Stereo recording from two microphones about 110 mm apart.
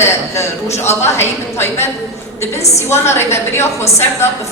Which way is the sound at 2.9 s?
20° left (ahead or behind).